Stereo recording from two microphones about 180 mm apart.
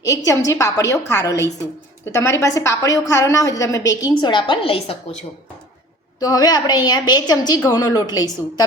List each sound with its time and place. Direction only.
0.0 s a woman's voice: 20° left (ahead or behind)
6.1 s a woman's voice: 20° left (ahead or behind)